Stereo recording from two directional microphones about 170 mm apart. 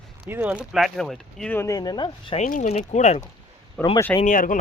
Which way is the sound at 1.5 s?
20° left (ahead or behind).